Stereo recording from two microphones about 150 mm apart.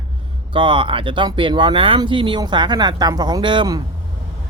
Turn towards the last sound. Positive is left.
turn(degrees=-30)  # may be behind; listen again after turning